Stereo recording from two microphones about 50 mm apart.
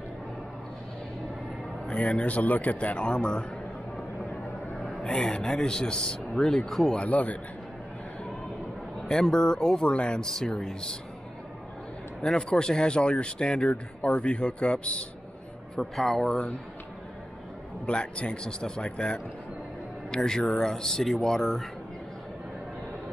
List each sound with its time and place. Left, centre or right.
1.9 s speech: left
4.8 s a sound: left
5.2 s speech: centre
7.0 s a man's voice: left
9.0 s speech: centre
12.2 s speech: centre
15.7 s speech: centre
17.8 s speech: left; by 21.6 s centre